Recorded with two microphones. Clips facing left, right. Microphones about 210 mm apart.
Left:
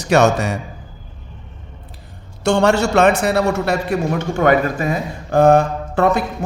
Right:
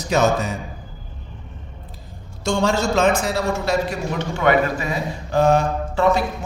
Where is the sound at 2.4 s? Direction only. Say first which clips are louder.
Left 5 dB; 70° left (ahead or behind).